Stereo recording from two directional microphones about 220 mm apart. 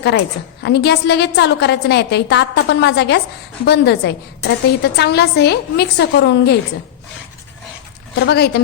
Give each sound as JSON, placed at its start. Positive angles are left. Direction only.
{"t": 0.6, "sound": "a woman's voice", "side_deg": 50}
{"t": 8.2, "sound": "a woman's voice", "side_deg": 50}